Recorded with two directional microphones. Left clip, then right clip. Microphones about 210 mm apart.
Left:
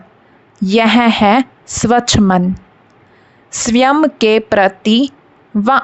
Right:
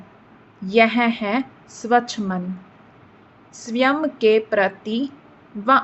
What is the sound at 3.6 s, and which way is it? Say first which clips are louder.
A woman's voice: left 9 dB; 55° left (ahead or behind).